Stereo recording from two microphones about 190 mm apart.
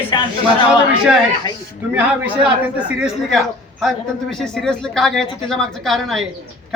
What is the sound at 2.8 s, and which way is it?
Speech, 5° right (ahead or behind).